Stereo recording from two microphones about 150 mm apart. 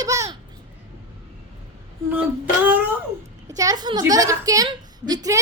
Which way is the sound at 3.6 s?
25° right (ahead or behind).